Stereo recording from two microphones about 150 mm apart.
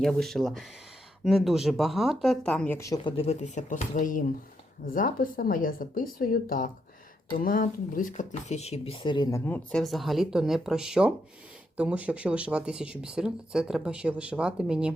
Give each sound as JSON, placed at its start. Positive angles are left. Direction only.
{"t": 0.0, "sound": "speech", "side_deg": 0}
{"t": 2.7, "sound": "speech", "side_deg": 20}
{"t": 3.0, "sound": "speech", "side_deg": 35}
{"t": 8.1, "sound": "speech", "side_deg": 50}
{"t": 9.5, "sound": "speech", "side_deg": 5}